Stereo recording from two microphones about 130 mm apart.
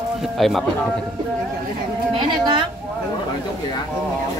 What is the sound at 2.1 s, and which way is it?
Speech, 35° right (ahead or behind).